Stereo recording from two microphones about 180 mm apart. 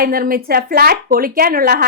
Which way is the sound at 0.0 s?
55° right (ahead or behind).